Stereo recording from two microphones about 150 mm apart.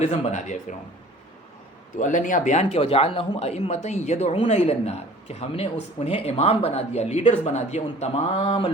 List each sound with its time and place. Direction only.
0.0 s speech: 50° left (ahead or behind)
2.0 s speech: 60° left (ahead or behind); by 8.7 s 35° left (ahead or behind)